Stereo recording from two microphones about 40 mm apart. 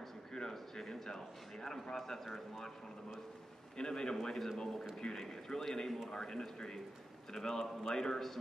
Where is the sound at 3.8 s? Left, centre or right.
Centre.